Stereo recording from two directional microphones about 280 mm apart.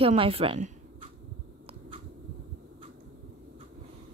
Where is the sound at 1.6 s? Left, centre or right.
Centre.